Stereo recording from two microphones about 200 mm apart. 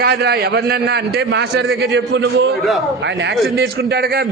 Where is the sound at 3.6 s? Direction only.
50° right (ahead or behind).